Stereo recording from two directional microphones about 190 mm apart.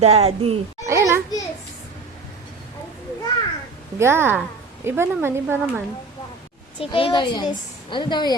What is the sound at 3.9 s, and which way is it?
Speech, 15° right (ahead or behind).